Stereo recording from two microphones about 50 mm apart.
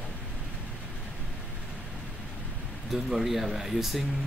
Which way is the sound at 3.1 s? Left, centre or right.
Centre.